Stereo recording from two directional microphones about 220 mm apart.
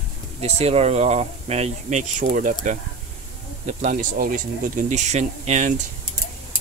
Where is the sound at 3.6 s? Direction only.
35° right (ahead or behind).